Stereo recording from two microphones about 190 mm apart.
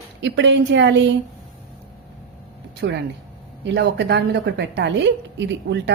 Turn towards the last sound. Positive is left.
turn(degrees=-65)  # may be behind; listen again after turning